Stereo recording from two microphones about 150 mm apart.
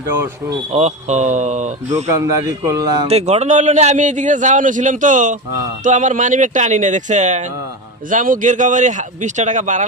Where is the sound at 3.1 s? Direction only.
45° right (ahead or behind).